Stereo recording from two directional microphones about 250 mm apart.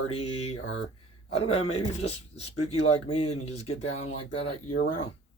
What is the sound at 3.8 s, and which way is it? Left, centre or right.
Speech, left.